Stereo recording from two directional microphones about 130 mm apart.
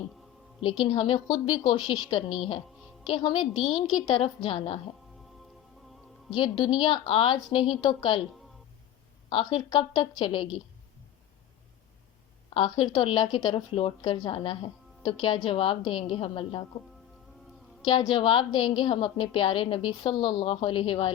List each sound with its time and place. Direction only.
0.6 s a woman's voice: 40° left (ahead or behind)
1.3 s a woman's voice: 35° left (ahead or behind)
6.3 s a woman's voice: 35° left (ahead or behind)
9.3 s a woman's voice: 40° left (ahead or behind)
12.5 s a woman's voice: 40° left (ahead or behind)
17.8 s a woman's voice: 35° left (ahead or behind)